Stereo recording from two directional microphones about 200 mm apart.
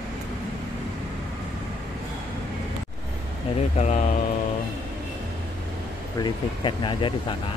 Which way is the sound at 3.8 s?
35° left (ahead or behind).